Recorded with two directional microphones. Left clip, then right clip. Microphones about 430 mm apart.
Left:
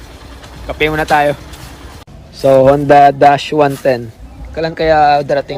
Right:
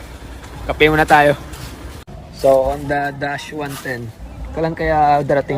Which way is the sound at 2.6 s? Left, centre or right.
Left.